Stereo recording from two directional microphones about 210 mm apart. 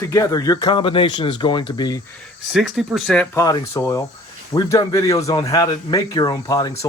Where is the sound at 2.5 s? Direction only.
Centre (ahead or behind).